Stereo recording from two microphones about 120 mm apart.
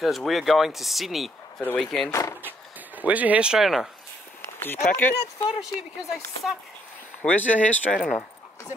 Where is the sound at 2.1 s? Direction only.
25° left (ahead or behind).